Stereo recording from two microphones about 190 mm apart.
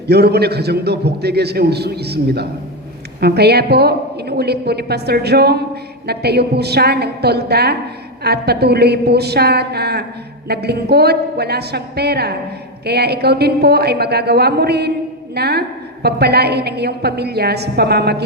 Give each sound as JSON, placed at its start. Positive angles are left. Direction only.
{"t": 0.1, "sound": "a woman's voice", "side_deg": -60}